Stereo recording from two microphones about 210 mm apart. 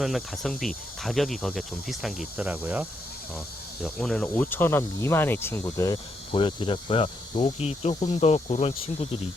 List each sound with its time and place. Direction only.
0.0 s speech: centre (ahead or behind)
3.8 s speech: centre (ahead or behind)
6.3 s speech: 25° left (ahead or behind)